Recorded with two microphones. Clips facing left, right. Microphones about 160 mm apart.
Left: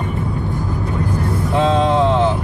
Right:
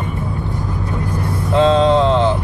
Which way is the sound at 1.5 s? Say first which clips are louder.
Right 4 dB; 5° left (ahead or behind).